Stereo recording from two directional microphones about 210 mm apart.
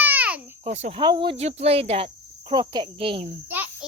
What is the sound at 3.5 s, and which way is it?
Insect, 5° right (ahead or behind).